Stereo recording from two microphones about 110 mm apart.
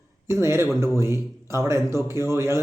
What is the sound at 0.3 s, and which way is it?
A man's voice, 25° right (ahead or behind).